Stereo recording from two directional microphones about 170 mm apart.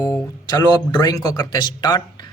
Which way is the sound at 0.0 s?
20° left (ahead or behind).